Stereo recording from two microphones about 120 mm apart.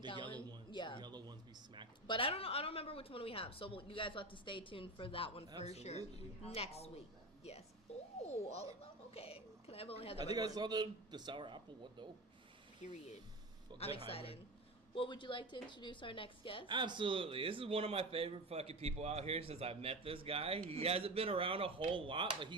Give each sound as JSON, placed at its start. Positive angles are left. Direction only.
{"t": 0.7, "sound": "a sound", "side_deg": 40}
{"t": 1.0, "sound": "a sound", "side_deg": -35}
{"t": 2.0, "sound": "a woman's voice", "side_deg": 50}
{"t": 5.6, "sound": "speech", "side_deg": 65}
{"t": 10.3, "sound": "a man's voice", "side_deg": -35}
{"t": 12.8, "sound": "speech", "side_deg": 90}
{"t": 13.7, "sound": "a woman's voice", "side_deg": 55}
{"t": 16.6, "sound": "speech", "side_deg": -40}